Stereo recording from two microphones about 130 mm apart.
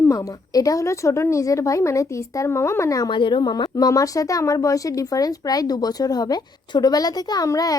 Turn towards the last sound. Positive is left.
turn(degrees=25)  # may be behind; listen again after turning